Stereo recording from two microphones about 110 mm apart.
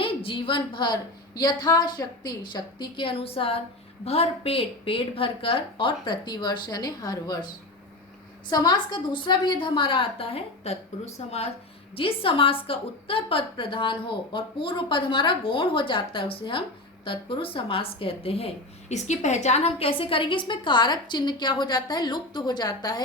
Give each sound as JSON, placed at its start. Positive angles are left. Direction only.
{"t": 0.0, "sound": "a woman's voice", "side_deg": 55}
{"t": 1.4, "sound": "a woman's voice", "side_deg": 35}
{"t": 8.4, "sound": "a woman's voice", "side_deg": 40}
{"t": 11.9, "sound": "a woman's voice", "side_deg": 55}